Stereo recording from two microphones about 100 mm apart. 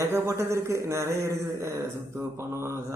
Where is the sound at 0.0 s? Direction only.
25° right (ahead or behind).